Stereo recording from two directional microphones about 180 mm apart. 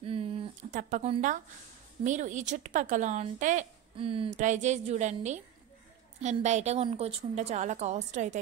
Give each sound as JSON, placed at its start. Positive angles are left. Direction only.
{"t": 0.0, "sound": "a sound", "side_deg": -30}
{"t": 0.7, "sound": "speech", "side_deg": -45}
{"t": 3.9, "sound": "a woman's voice", "side_deg": -30}
{"t": 4.4, "sound": "a woman's voice", "side_deg": -40}